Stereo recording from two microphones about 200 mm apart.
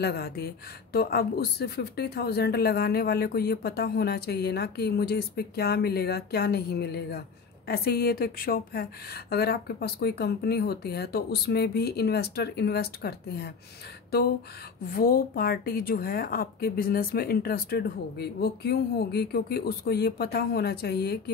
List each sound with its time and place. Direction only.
0.0 s a woman's voice: 50° left (ahead or behind)
14.9 s a woman's voice: 45° left (ahead or behind)